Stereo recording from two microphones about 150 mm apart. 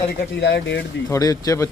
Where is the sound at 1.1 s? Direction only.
25° left (ahead or behind).